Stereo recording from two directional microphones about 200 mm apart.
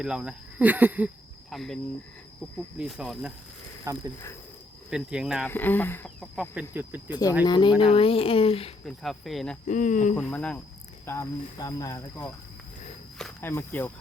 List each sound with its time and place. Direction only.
0.0 s speech: 5° right (ahead or behind)
3.9 s speech: 15° right (ahead or behind)
4.9 s speech: 5° right (ahead or behind)
5.5 s speech: 10° left (ahead or behind)
6.3 s speech: 5° right (ahead or behind)
7.4 s speech: 20° left (ahead or behind)
8.8 s speech: centre (ahead or behind)
9.6 s speech: 40° left (ahead or behind)
10.2 s speech: 5° left (ahead or behind)